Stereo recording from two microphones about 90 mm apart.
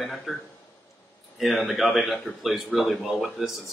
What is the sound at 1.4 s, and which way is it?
A man's voice, centre (ahead or behind).